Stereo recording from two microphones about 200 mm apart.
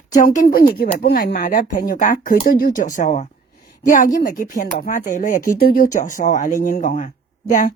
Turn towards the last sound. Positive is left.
turn(degrees=40)  # may be behind; listen again after turning